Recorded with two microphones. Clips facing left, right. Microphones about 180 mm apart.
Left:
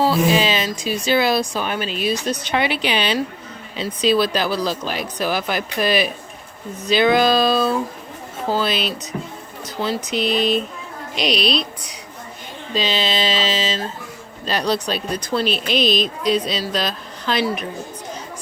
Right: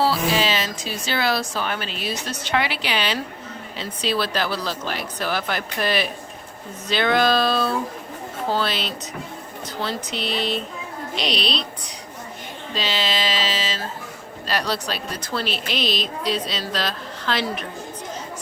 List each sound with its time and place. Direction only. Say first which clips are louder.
0.0 s speech: left 4 dB; 15° left (ahead or behind)
12.7 s a sound: left 4 dB; 20° left (ahead or behind)
14.4 s speech: left 4 dB; 20° left (ahead or behind)